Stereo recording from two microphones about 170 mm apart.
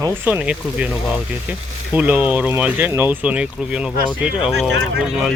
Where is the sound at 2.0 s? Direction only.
10° right (ahead or behind).